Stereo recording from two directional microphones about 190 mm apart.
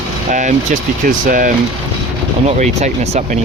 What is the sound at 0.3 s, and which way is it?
Speech, 40° right (ahead or behind).